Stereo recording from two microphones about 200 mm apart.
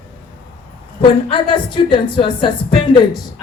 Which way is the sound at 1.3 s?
25° left (ahead or behind).